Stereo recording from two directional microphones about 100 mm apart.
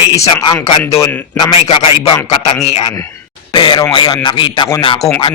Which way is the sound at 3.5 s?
55° left (ahead or behind).